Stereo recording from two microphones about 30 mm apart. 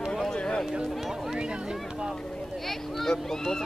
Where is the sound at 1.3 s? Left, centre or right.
Right.